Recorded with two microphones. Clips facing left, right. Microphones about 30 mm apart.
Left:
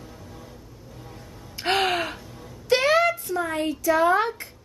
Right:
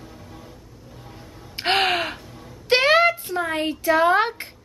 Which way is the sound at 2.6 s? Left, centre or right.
Right.